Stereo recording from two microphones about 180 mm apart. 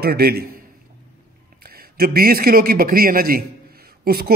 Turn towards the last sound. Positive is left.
turn(degrees=-60)  # may be behind; listen again after turning